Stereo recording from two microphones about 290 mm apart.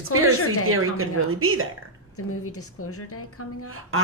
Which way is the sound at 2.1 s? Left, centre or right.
Left.